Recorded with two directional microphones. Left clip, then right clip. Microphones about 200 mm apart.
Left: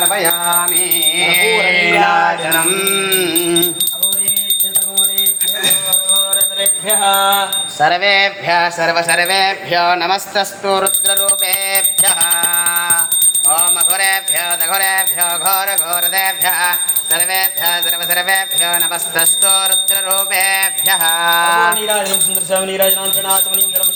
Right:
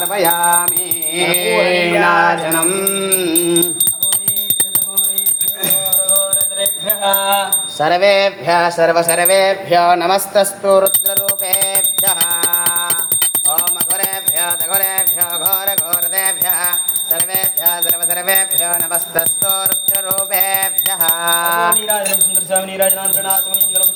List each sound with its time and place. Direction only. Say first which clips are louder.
0.0 s music: right 1 dB; 55° right (ahead or behind)
7.1 s jingle bell: left 2 dB; 45° left (ahead or behind)
7.8 s mantra: even; 45° right (ahead or behind)
14.1 s music: left 4 dB; 45° right (ahead or behind)
17.3 s jingle bell: left 5 dB; 50° right (ahead or behind)
20.1 s mantra: left 2 dB; 45° right (ahead or behind)
22.4 s jingle bell: left 2 dB; 45° left (ahead or behind)